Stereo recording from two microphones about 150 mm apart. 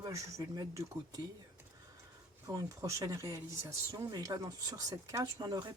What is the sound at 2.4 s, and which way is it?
Speech, 25° right (ahead or behind).